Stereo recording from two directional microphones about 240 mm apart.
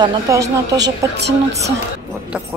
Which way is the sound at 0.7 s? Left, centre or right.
Right.